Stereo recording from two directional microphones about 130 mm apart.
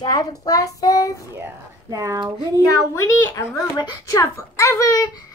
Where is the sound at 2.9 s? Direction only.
20° left (ahead or behind).